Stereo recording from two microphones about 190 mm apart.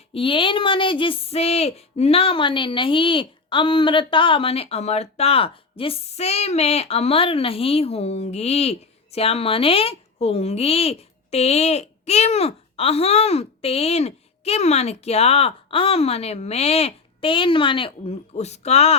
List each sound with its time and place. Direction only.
0.1 s speech: 25° left (ahead or behind)